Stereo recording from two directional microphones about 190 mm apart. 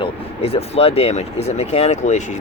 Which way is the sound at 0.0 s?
30° left (ahead or behind).